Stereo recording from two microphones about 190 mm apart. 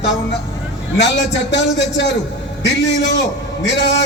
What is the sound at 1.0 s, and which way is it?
A man's voice, 70° left (ahead or behind).